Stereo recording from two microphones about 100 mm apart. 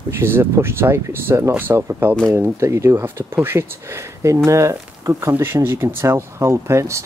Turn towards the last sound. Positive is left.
turn(degrees=-30)  # may be behind; listen again after turning